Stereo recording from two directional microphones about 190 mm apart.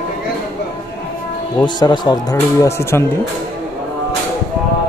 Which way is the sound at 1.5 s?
20° left (ahead or behind).